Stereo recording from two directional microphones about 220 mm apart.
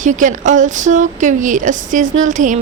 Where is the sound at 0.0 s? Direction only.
35° right (ahead or behind).